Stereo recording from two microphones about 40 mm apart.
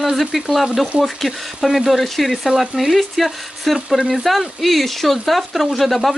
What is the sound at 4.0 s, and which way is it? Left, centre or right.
Speech, right.